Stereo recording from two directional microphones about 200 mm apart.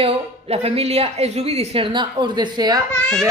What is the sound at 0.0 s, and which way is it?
A woman's voice, 30° right (ahead or behind).